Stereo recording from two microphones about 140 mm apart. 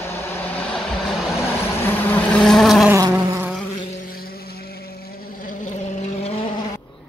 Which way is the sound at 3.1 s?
15° right (ahead or behind).